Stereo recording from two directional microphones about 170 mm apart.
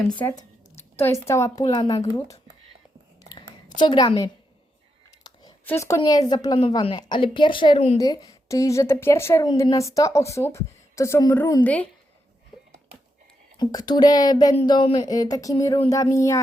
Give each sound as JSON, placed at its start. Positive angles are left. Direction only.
{"t": 0.8, "sound": "speech", "side_deg": 15}
{"t": 3.8, "sound": "speech", "side_deg": 25}
{"t": 5.2, "sound": "a sound", "side_deg": 25}
{"t": 5.6, "sound": "speech", "side_deg": 15}
{"t": 7.9, "sound": "a woman's voice", "side_deg": 20}
{"t": 12.5, "sound": "a sound", "side_deg": 0}
{"t": 13.6, "sound": "speech", "side_deg": 25}